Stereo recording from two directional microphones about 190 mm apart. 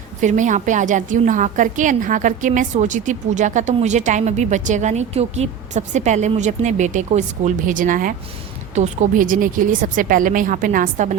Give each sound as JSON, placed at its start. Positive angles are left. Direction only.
{"t": 0.2, "sound": "a woman's voice", "side_deg": -40}